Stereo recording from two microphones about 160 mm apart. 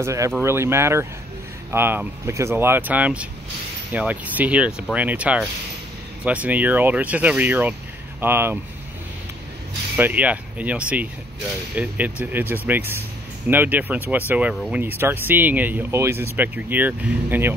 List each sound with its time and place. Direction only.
0.0 s speech: 20° right (ahead or behind)
9.9 s speech: 10° right (ahead or behind)
15.0 s speech: 15° right (ahead or behind)